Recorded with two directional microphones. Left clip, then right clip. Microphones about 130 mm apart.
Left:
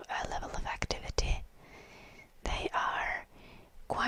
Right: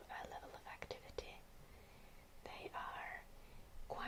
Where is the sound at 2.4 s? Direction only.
60° left (ahead or behind).